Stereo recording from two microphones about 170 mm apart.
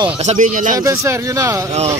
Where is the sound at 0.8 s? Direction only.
15° right (ahead or behind).